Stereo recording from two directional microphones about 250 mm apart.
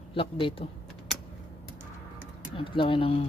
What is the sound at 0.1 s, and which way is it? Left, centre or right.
Speech, left.